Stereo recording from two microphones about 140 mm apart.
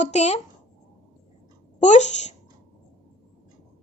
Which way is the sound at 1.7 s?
55° left (ahead or behind).